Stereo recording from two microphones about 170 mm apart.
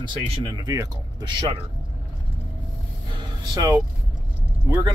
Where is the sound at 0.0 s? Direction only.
25° right (ahead or behind).